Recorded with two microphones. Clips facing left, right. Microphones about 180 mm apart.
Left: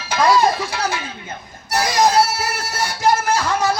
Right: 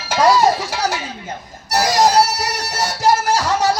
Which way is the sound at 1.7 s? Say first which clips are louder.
Right 2 dB; 40° right (ahead or behind).